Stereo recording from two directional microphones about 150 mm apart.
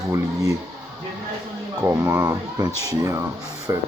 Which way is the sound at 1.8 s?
15° right (ahead or behind).